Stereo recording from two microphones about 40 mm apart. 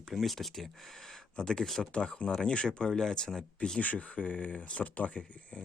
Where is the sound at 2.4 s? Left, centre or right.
Left.